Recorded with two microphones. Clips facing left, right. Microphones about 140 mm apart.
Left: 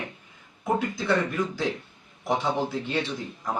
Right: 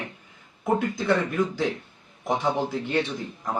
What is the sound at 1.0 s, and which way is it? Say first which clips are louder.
A man's voice: right 2 dB; 15° right (ahead or behind).